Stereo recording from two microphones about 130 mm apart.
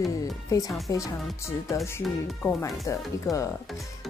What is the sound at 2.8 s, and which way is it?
Speech, 25° left (ahead or behind).